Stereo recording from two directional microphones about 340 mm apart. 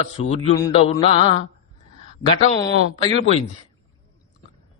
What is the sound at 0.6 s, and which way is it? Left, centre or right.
Mantra, centre.